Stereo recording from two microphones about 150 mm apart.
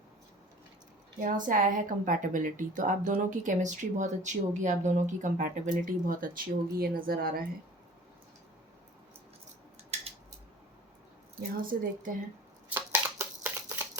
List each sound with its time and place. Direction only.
1.5 s a woman's voice: 65° right (ahead or behind); by 7.4 s 80° right
11.5 s a woman's voice: 70° right (ahead or behind)
12.6 s a sound: 15° right (ahead or behind)